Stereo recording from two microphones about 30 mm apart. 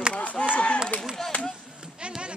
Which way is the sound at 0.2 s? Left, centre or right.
Left.